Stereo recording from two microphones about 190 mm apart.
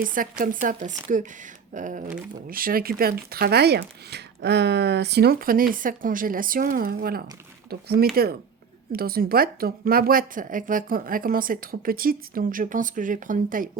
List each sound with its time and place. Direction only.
0.0 s a woman's voice: 45° right (ahead or behind)